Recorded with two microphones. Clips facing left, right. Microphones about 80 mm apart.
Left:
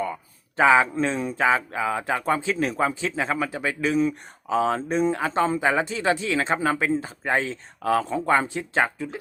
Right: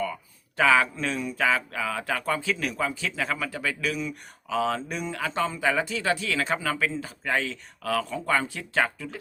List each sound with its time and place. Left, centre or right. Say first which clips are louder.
0.0 s speech: left 2 dB; left